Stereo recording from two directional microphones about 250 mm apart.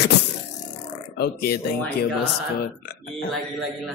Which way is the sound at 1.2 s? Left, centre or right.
Left.